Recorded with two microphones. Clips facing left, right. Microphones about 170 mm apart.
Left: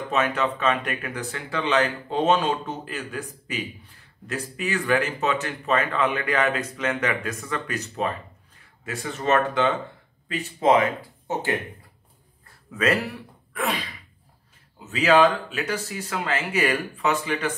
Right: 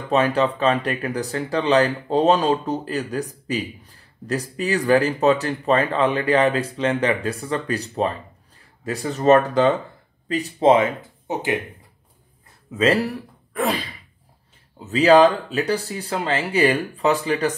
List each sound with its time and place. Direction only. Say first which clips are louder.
0.1 s speech: right 6 dB; 35° right (ahead or behind)
12.4 s a sound: right 4 dB; 25° right (ahead or behind)
13.0 s speech: right 7 dB; 35° right (ahead or behind)
14.9 s speech: right 5 dB; 35° right (ahead or behind)